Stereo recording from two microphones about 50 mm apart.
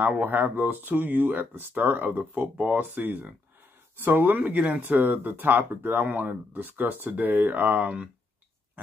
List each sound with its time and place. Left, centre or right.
0.0 s speech: right
4.5 s speech: right